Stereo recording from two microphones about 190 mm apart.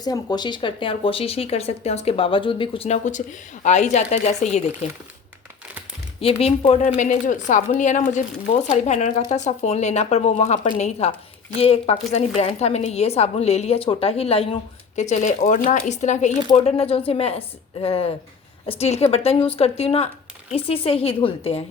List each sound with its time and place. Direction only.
0.0 s speech: 20° left (ahead or behind)
6.1 s speech: 30° left (ahead or behind)